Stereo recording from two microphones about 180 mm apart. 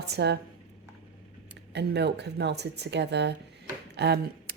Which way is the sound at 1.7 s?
70° right (ahead or behind).